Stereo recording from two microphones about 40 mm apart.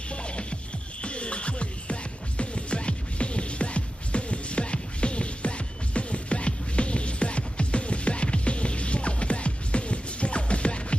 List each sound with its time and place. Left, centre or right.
0.1 s music: left